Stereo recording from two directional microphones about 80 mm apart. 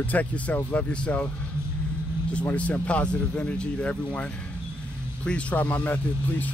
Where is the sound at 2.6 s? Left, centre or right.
Centre.